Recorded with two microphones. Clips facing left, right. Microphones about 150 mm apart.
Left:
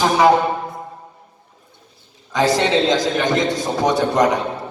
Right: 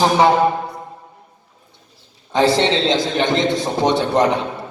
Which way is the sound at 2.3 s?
25° right (ahead or behind).